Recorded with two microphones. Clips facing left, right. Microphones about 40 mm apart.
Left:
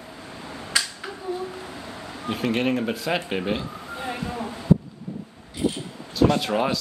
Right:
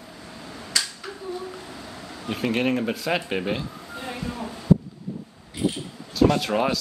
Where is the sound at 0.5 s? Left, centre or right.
Centre.